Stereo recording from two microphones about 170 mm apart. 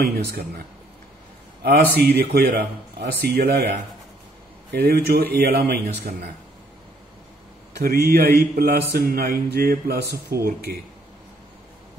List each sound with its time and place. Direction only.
0.0 s speech: 65° right (ahead or behind)
1.6 s speech: 70° right (ahead or behind)
4.7 s speech: 65° right (ahead or behind)
7.7 s speech: 65° right (ahead or behind)